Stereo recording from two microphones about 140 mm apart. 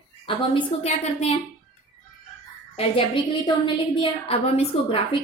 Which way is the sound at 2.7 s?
40° left (ahead or behind).